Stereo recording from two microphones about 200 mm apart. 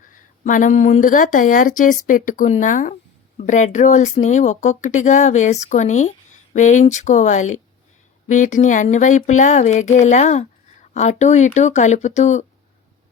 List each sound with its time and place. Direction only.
0.1 s speech: 40° left (ahead or behind)